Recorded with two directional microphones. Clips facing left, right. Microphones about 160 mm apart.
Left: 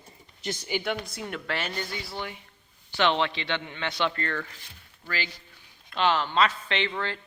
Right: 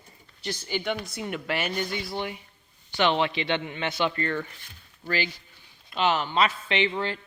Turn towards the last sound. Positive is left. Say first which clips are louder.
# right 3 dB
turn(degrees=-15)  # may be behind; listen again after turning